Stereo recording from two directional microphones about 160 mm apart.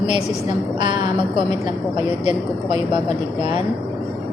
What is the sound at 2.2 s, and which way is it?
Speech, 30° right (ahead or behind).